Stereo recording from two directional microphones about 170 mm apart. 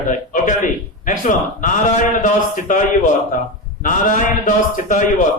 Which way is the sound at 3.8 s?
50° left (ahead or behind).